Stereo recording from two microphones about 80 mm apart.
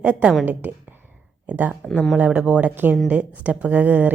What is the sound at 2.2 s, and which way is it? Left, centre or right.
A woman's voice, centre.